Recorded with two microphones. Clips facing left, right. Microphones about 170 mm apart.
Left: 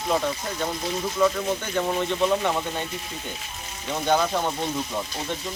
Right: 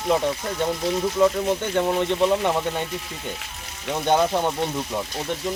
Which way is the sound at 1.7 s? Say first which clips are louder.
Right 3 dB; 20° right (ahead or behind).